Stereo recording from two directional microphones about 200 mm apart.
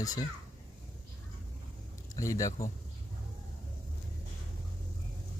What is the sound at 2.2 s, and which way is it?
Speech, 15° left (ahead or behind).